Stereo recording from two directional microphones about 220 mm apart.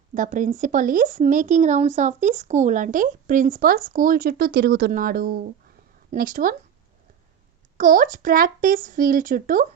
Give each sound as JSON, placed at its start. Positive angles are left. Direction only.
{"t": 0.1, "sound": "speech", "side_deg": -35}
{"t": 7.8, "sound": "speech", "side_deg": -40}